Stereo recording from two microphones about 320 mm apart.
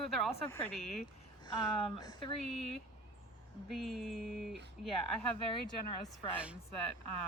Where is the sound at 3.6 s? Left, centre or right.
Centre.